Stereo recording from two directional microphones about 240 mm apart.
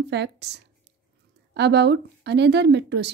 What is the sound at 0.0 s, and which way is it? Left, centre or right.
A woman's voice, right.